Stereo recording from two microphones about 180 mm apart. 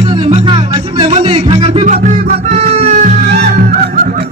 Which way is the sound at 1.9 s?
45° right (ahead or behind).